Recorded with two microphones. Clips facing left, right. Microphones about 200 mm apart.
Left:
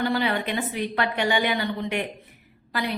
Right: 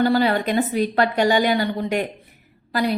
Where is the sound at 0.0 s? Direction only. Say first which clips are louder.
Right 6 dB; 40° right (ahead or behind).